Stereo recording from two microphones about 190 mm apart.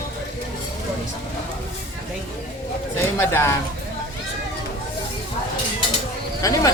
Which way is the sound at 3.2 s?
15° left (ahead or behind).